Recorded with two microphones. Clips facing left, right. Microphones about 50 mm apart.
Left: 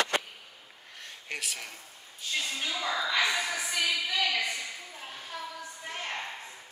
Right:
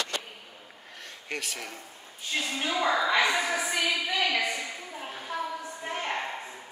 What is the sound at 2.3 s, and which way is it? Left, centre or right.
A woman's voice, right.